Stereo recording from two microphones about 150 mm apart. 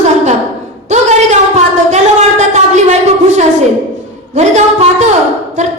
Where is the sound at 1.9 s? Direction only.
50° right (ahead or behind).